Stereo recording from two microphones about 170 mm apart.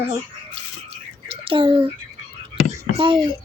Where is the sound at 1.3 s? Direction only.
30° right (ahead or behind).